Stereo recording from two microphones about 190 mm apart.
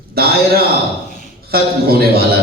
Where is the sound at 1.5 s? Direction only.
55° right (ahead or behind).